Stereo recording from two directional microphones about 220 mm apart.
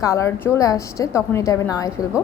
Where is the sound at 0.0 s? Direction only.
15° left (ahead or behind).